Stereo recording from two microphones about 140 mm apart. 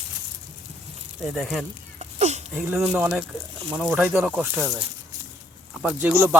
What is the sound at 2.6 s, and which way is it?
Speech, 15° right (ahead or behind).